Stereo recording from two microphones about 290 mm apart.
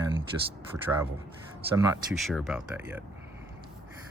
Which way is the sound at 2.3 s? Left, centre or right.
Centre.